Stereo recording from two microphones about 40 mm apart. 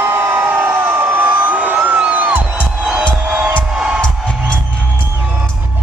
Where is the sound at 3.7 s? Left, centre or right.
Centre.